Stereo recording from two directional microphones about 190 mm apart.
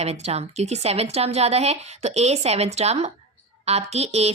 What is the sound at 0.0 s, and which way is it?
A woman's voice, 35° right (ahead or behind).